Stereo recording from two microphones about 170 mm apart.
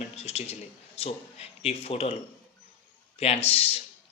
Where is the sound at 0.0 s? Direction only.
40° left (ahead or behind).